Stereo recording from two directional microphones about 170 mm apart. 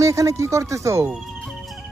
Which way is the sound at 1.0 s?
Centre (ahead or behind).